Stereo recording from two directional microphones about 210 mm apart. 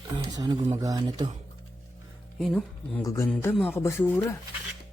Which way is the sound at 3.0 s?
15° left (ahead or behind).